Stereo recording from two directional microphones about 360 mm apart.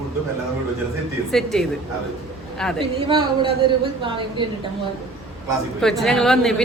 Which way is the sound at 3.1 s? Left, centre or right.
Centre.